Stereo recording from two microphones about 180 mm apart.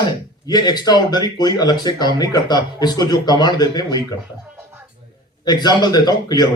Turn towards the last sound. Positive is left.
turn(degrees=20)  # may be behind; listen again after turning